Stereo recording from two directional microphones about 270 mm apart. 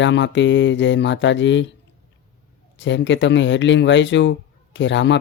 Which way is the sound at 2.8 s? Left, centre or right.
Left.